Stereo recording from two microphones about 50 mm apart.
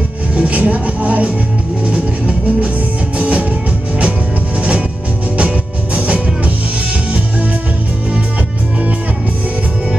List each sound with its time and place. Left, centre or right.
0.4 s music: right
5.9 s music: right